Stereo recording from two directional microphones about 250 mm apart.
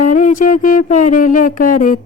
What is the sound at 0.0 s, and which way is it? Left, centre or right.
Music, left.